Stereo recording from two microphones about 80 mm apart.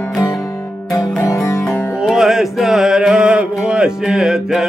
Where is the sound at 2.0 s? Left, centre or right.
Centre.